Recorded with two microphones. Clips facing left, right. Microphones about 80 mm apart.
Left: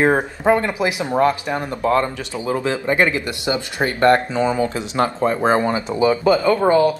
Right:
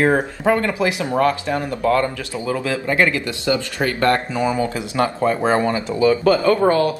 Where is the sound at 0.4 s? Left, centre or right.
Centre.